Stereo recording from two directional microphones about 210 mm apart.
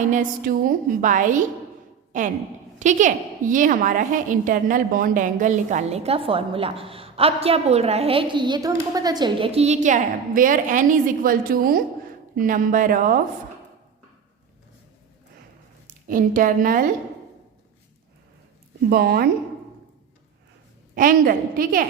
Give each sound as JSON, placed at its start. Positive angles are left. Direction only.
{"t": 0.1, "sound": "a woman's voice", "side_deg": -40}
{"t": 16.0, "sound": "a woman's voice", "side_deg": -40}
{"t": 18.9, "sound": "a woman's voice", "side_deg": -45}
{"t": 20.9, "sound": "a woman's voice", "side_deg": -40}